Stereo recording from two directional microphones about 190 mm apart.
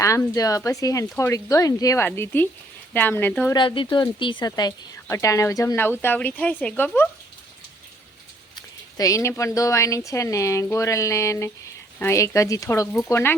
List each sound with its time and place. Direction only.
0.0 s speech: 15° left (ahead or behind)
3.5 s speech: 25° left (ahead or behind)
8.5 s speech: 20° left (ahead or behind)